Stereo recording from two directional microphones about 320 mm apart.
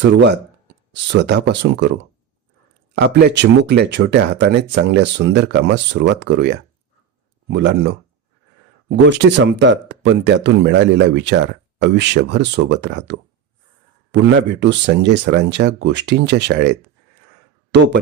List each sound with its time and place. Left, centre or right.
1.1 s speech: right
3.0 s speech: right